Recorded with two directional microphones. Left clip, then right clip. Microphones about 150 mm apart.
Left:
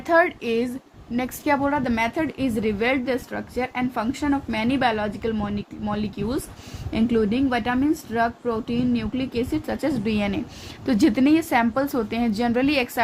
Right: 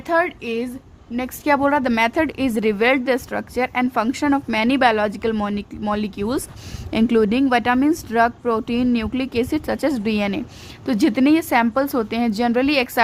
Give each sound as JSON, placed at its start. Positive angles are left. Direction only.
{"t": 0.1, "sound": "speech", "side_deg": -10}
{"t": 1.6, "sound": "a woman's voice", "side_deg": -40}